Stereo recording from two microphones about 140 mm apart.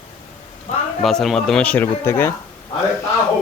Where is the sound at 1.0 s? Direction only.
Centre (ahead or behind); by 2.3 s 15° left (ahead or behind).